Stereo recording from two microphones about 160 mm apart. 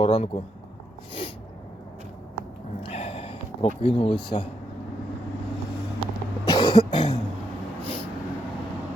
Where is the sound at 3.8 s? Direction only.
35° left (ahead or behind).